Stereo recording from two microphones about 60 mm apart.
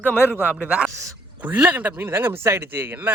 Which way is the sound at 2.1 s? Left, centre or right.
Right.